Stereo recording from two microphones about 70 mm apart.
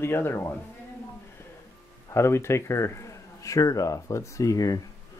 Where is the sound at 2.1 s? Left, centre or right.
Left.